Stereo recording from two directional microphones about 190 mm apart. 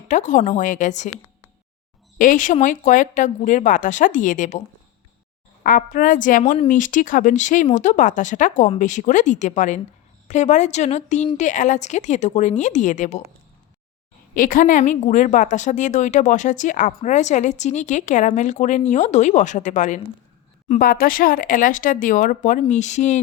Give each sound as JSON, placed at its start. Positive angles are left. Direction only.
{"t": 0.1, "sound": "a woman's voice", "side_deg": 40}
{"t": 2.1, "sound": "speech", "side_deg": 45}
{"t": 5.6, "sound": "a woman's voice", "side_deg": 45}
{"t": 14.3, "sound": "a woman's voice", "side_deg": 45}